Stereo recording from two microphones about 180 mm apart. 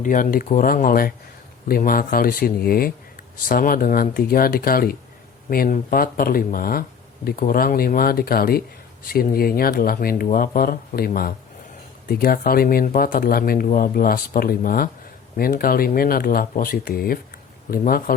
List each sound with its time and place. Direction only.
0.0 s speech: 50° left (ahead or behind)